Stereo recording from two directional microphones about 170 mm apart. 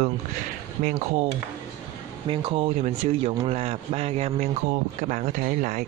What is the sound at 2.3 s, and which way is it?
A man's voice, 30° right (ahead or behind).